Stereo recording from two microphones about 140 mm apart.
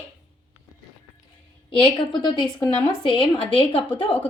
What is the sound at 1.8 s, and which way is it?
Speech, 30° left (ahead or behind).